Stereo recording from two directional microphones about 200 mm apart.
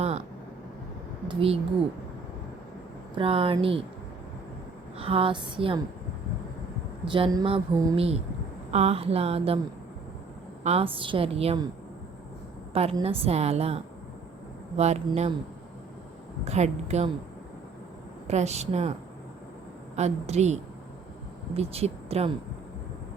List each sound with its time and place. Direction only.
1.3 s a woman's voice: 25° right (ahead or behind)
3.2 s a woman's voice: 25° right (ahead or behind)
4.9 s a woman's voice: 30° right (ahead or behind)
7.1 s a woman's voice: 20° right (ahead or behind)
10.6 s a woman's voice: 30° right (ahead or behind)
12.7 s a woman's voice: 30° right (ahead or behind)
16.4 s speech: 35° right (ahead or behind)
18.3 s speech: 35° right (ahead or behind)
20.0 s speech: 35° right (ahead or behind)